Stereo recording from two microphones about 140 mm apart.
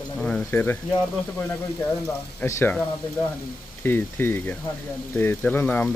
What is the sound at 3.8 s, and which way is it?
Speech, 15° left (ahead or behind).